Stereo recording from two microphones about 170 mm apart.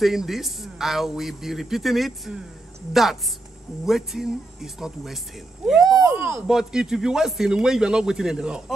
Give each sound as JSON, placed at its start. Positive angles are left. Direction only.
{"t": 0.0, "sound": "a man's voice", "side_deg": 0}
{"t": 6.0, "sound": "a sound", "side_deg": -10}
{"t": 6.4, "sound": "a man's voice", "side_deg": -5}